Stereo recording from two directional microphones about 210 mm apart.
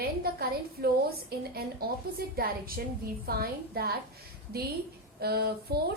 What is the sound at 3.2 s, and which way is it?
Speech, 45° right (ahead or behind).